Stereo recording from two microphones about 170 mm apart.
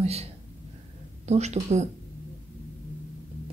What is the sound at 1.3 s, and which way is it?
Speech, 40° right (ahead or behind).